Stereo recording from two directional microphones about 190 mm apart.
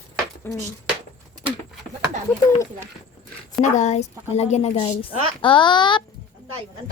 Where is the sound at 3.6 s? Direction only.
40° left (ahead or behind).